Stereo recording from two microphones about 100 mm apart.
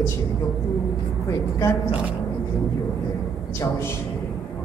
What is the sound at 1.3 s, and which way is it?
Speech, 30° left (ahead or behind).